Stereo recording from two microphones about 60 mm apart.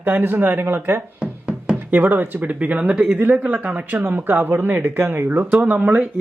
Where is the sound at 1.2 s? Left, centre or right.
Centre.